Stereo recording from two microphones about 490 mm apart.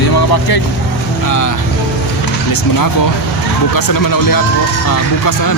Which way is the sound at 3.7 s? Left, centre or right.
Left.